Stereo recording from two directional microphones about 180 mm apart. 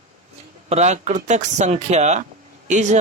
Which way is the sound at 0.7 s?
40° right (ahead or behind).